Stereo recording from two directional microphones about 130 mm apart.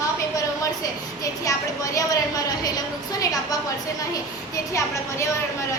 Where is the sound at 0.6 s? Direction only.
25° left (ahead or behind).